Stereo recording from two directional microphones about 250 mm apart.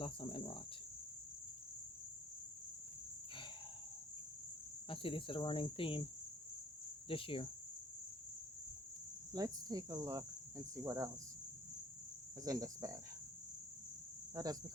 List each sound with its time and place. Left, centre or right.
0.0 s cricket: left
4.9 s cricket: left
7.1 s cricket: left
9.3 s cricket: centre
12.4 s cricket: centre
14.3 s cricket: centre